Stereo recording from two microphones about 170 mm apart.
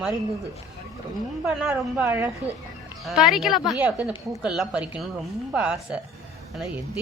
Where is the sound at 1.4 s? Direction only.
5° right (ahead or behind).